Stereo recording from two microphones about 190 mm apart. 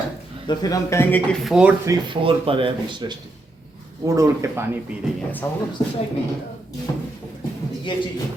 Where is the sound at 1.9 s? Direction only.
25° right (ahead or behind).